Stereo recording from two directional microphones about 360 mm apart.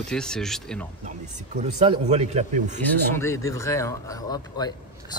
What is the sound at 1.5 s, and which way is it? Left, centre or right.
Speech, centre.